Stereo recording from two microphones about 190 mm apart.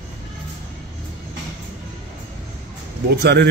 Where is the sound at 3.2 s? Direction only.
60° right (ahead or behind).